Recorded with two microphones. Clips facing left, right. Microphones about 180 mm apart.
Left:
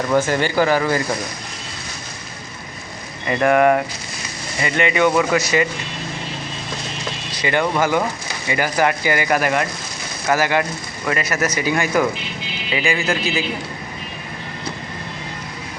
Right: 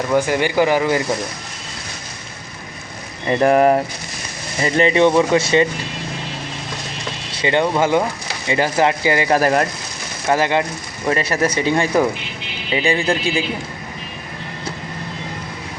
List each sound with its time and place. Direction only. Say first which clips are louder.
0.1 s speech: right 1 dB; 15° right (ahead or behind)
3.2 s speech: right 2 dB; 30° right (ahead or behind)
7.3 s speech: right 2 dB; 25° right (ahead or behind)
10.2 s speech: right 1 dB; 25° right (ahead or behind)